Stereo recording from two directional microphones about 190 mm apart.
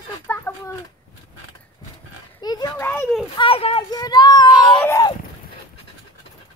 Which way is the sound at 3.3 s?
30° left (ahead or behind).